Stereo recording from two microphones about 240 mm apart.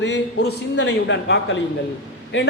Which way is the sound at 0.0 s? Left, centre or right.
Left.